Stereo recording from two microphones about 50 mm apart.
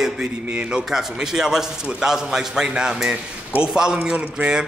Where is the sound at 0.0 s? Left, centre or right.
Centre.